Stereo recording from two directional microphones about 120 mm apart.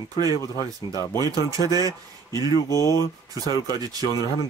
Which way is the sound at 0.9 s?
30° left (ahead or behind).